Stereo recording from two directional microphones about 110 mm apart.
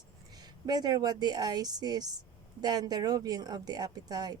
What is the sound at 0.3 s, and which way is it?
Speech, 40° right (ahead or behind).